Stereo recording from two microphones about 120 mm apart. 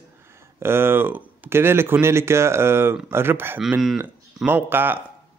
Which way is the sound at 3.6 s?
5° right (ahead or behind).